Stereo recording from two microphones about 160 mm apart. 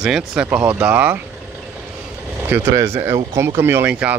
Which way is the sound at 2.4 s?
15° right (ahead or behind).